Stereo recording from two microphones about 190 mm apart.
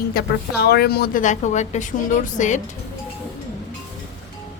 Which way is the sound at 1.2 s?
40° left (ahead or behind).